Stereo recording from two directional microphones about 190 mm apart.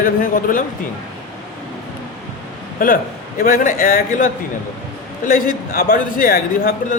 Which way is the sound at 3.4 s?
45° left (ahead or behind).